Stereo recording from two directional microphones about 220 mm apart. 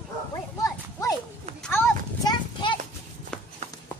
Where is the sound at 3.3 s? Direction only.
5° left (ahead or behind).